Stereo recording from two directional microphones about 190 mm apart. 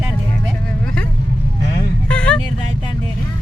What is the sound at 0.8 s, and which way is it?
Vehicle, 5° left (ahead or behind).